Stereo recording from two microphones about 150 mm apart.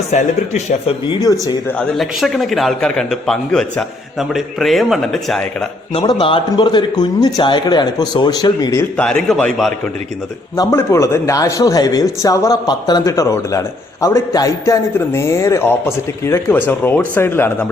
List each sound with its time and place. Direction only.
0.1 s speech: 50° left (ahead or behind)
1.0 s a man's voice: 30° left (ahead or behind)
2.0 s a man's voice: centre (ahead or behind)
5.9 s a man's voice: 30° left (ahead or behind)
9.0 s a man's voice: 5° left (ahead or behind)
10.5 s a man's voice: 20° left (ahead or behind)